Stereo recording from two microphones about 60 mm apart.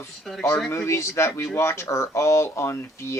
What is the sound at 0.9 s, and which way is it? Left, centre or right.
Speech, left.